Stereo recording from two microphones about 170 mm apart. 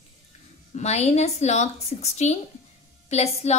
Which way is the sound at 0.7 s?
40° left (ahead or behind).